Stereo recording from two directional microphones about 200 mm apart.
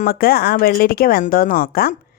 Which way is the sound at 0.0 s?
50° left (ahead or behind).